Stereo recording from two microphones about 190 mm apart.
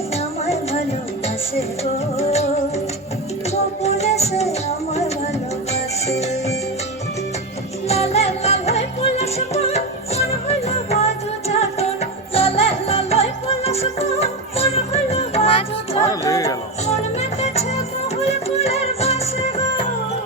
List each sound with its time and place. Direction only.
0.4 s a sound: 35° left (ahead or behind)
1.5 s music: 35° left (ahead or behind)
3.5 s music: 35° left (ahead or behind)
7.9 s music: 35° left (ahead or behind)
16.0 s music: 15° left (ahead or behind)
16.8 s music: 35° left (ahead or behind)